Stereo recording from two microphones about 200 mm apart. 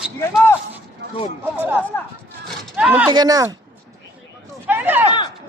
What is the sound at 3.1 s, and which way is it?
Speech, 20° right (ahead or behind).